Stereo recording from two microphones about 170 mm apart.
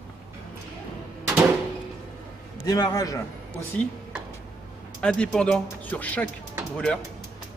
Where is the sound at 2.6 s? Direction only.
20° left (ahead or behind).